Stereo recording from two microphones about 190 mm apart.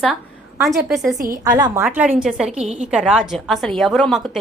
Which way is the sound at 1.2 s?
50° right (ahead or behind).